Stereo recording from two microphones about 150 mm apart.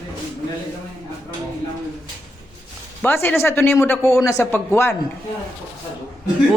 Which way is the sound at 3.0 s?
15° left (ahead or behind).